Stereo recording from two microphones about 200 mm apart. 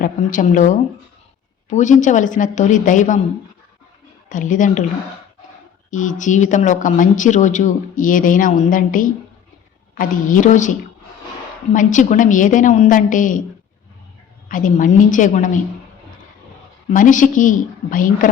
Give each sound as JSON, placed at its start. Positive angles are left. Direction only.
{"t": 0.0, "sound": "speech", "side_deg": 40}
{"t": 4.3, "sound": "speech", "side_deg": 40}
{"t": 5.9, "sound": "speech", "side_deg": 40}
{"t": 14.4, "sound": "speech", "side_deg": 40}
{"t": 16.9, "sound": "speech", "side_deg": 40}